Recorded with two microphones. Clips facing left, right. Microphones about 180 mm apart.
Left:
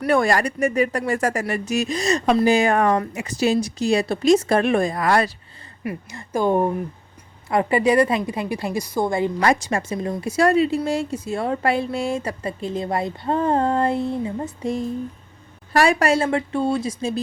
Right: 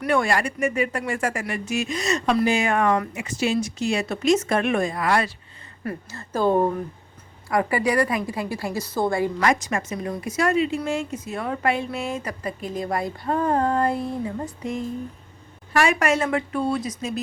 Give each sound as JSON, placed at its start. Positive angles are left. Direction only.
{"t": 0.0, "sound": "speech", "side_deg": 40}
{"t": 5.8, "sound": "speech", "side_deg": 15}
{"t": 7.5, "sound": "speech", "side_deg": 25}
{"t": 9.4, "sound": "speech", "side_deg": 30}